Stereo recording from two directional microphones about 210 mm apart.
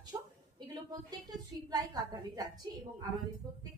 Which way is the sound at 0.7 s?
20° right (ahead or behind).